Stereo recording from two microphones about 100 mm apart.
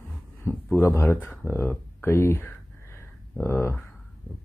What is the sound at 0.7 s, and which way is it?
Speech, 25° left (ahead or behind).